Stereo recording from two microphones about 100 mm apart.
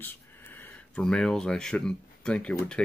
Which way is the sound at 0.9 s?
5° left (ahead or behind).